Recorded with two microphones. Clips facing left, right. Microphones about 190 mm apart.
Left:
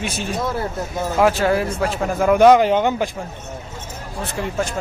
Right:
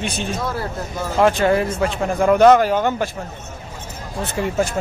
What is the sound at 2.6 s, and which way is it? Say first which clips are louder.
Speech: left 1 dB; 20° left (ahead or behind).